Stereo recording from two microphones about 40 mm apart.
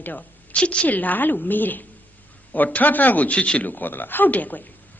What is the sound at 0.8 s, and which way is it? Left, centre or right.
A man's voice, left.